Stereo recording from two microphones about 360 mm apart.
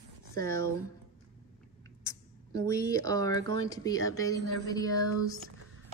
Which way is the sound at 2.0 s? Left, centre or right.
Centre.